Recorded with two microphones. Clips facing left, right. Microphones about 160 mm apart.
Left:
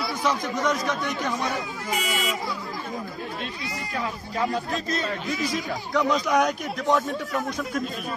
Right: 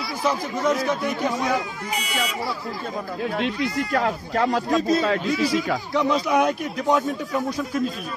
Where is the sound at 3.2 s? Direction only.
75° right (ahead or behind); by 4.8 s 90° right.